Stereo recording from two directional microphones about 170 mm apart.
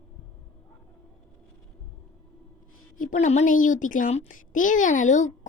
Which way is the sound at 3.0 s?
45° left (ahead or behind).